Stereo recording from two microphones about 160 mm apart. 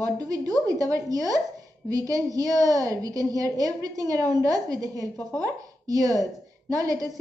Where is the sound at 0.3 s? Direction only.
20° right (ahead or behind).